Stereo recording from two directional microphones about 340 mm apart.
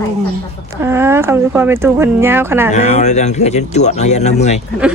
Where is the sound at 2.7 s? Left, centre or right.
Left.